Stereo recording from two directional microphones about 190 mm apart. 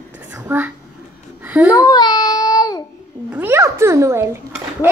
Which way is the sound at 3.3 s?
10° right (ahead or behind).